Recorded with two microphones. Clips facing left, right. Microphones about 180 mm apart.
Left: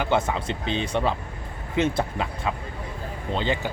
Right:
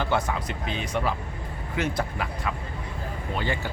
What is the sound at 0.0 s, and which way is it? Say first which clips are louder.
Speech: left 3 dB; 25° left (ahead or behind).